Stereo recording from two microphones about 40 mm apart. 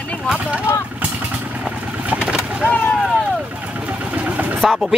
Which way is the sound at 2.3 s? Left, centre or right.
Right.